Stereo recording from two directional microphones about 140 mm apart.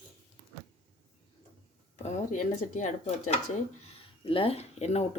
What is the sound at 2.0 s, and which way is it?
Speech, 60° left (ahead or behind).